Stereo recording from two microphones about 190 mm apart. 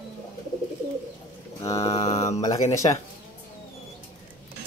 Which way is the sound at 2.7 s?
15° left (ahead or behind).